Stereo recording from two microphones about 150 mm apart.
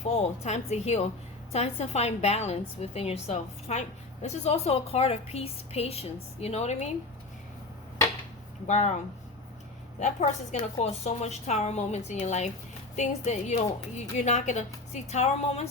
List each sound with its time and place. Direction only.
0.0 s a woman's voice: 50° left (ahead or behind)
8.6 s a woman's voice: 50° left (ahead or behind)
10.0 s a woman's voice: 50° left (ahead or behind)